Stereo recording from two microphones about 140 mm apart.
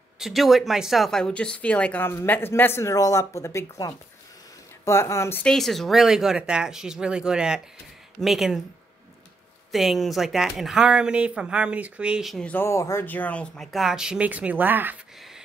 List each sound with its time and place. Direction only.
0.2 s speech: centre (ahead or behind); by 5.4 s 20° left (ahead or behind)
5.4 s speech: 5° left (ahead or behind)
9.7 s speech: centre (ahead or behind)
12.4 s speech: 15° left (ahead or behind); by 15.0 s 15° right (ahead or behind)